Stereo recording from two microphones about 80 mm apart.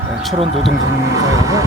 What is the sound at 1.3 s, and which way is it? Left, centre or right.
Speech, right.